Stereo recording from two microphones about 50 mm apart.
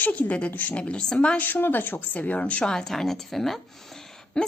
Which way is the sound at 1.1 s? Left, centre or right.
Left.